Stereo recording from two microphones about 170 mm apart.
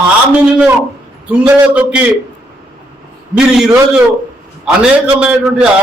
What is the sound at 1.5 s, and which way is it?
Speech, 5° right (ahead or behind).